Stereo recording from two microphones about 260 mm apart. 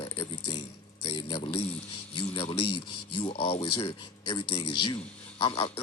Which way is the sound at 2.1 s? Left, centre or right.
Centre.